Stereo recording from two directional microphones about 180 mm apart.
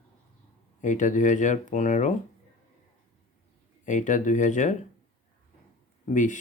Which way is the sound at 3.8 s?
45° left (ahead or behind).